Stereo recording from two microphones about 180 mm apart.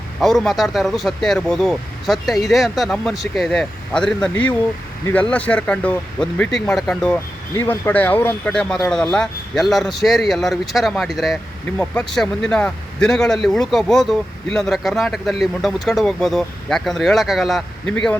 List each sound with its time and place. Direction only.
0.2 s speech: centre (ahead or behind)